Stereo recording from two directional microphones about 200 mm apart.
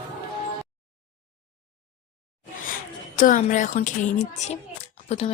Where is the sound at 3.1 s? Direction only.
40° left (ahead or behind).